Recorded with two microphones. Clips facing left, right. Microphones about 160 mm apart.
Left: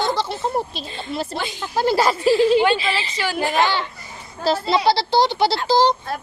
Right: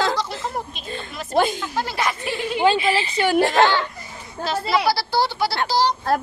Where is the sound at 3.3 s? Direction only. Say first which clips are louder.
Right 4 dB; 70° right (ahead or behind).